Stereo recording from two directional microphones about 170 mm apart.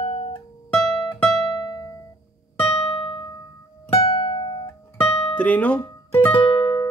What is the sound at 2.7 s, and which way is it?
Music, 35° left (ahead or behind).